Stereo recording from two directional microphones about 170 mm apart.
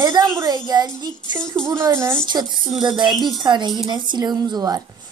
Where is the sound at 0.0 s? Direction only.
25° right (ahead or behind).